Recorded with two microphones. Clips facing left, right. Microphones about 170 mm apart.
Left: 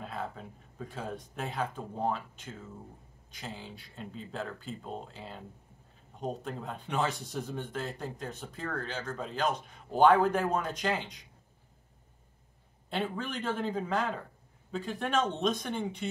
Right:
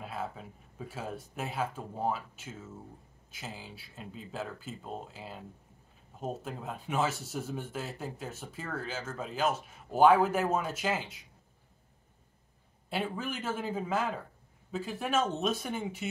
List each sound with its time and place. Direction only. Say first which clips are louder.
0.0 s speech: even; 5° right (ahead or behind)
12.9 s speech: left 1 dB; 5° right (ahead or behind)